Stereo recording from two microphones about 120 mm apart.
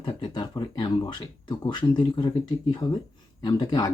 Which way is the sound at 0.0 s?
35° left (ahead or behind).